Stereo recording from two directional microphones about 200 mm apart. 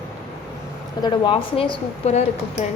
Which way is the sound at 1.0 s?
20° left (ahead or behind).